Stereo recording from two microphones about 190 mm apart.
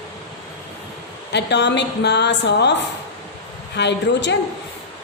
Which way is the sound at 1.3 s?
65° left (ahead or behind).